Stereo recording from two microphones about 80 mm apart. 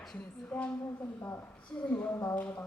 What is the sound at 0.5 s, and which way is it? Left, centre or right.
Speech, centre.